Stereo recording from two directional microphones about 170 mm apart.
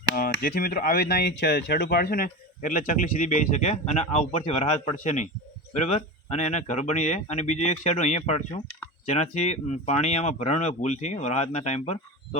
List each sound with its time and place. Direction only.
0.1 s speech: 60° left (ahead or behind); by 12.4 s 40° left (ahead or behind)